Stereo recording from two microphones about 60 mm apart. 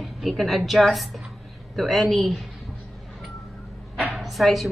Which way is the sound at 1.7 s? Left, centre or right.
Centre.